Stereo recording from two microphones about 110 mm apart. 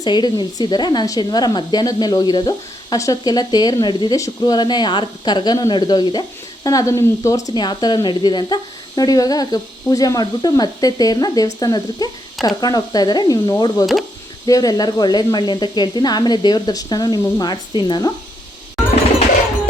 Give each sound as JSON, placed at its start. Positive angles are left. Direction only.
{"t": 0.0, "sound": "speech", "side_deg": 40}
{"t": 6.7, "sound": "speech", "side_deg": 30}